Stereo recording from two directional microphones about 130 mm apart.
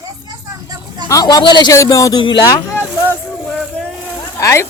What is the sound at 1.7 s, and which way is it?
Speech, 25° left (ahead or behind).